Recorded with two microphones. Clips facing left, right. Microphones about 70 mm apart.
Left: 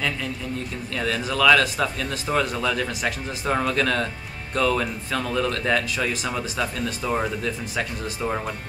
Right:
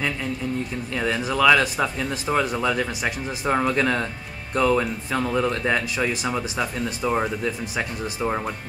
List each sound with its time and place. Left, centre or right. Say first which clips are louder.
1.0 s speech: right 1 dB; centre